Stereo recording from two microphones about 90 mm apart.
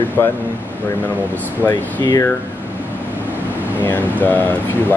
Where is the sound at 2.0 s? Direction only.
40° left (ahead or behind).